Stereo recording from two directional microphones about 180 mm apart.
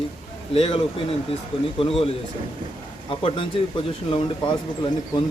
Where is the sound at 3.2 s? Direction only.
30° left (ahead or behind).